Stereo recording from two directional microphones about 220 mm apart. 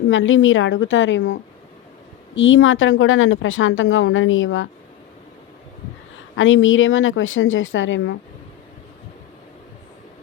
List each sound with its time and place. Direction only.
0.1 s a woman's voice: 60° left (ahead or behind)
6.3 s a woman's voice: 60° left (ahead or behind)